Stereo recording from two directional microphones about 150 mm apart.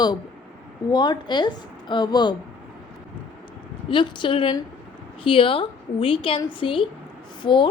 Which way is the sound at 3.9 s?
35° left (ahead or behind).